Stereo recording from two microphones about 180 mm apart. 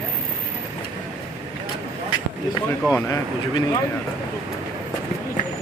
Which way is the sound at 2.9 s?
15° left (ahead or behind).